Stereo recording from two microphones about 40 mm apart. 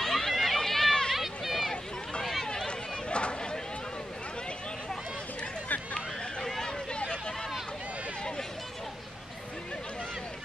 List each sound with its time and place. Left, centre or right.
0.0 s run: centre
1.1 s run: centre
2.4 s run: centre
3.1 s run: left
6.6 s a sound: left